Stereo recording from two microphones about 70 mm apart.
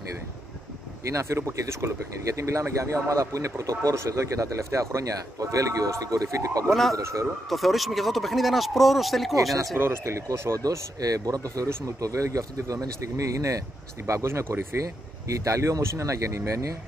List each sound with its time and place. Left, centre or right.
1.0 s speech: right
6.7 s speech: centre
7.0 s speech: right
7.4 s speech: centre
9.8 s speech: right
10.6 s speech: right
15.2 s speech: right